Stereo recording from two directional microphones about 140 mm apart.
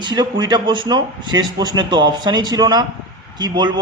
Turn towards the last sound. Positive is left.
turn(degrees=-30)  # may be behind; listen again after turning